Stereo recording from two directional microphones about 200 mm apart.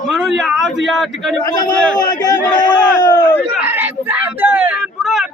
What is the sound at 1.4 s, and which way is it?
A man's voice, 20° left (ahead or behind).